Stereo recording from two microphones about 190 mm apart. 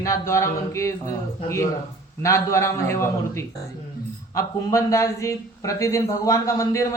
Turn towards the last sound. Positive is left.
turn(degrees=15)  # may be behind; listen again after turning